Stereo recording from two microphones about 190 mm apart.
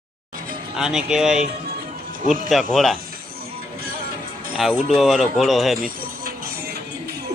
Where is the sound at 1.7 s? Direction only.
50° right (ahead or behind).